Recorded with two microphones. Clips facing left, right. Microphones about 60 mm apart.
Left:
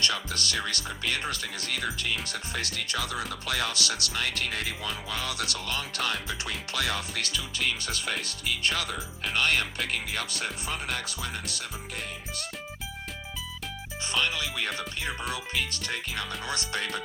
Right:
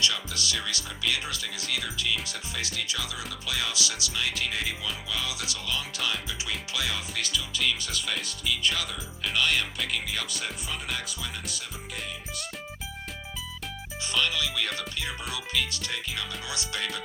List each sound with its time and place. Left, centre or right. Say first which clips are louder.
0.0 s speech: even; left
14.1 s speech: right 1 dB; left
14.8 s music: left 1 dB; left
15.3 s speech: even; left